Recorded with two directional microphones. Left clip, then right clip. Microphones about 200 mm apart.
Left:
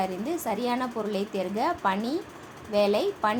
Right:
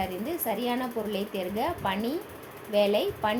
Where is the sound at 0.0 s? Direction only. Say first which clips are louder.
Left 2 dB; 15° left (ahead or behind).